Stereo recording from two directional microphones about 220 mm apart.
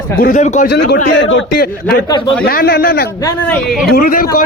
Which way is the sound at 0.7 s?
50° left (ahead or behind).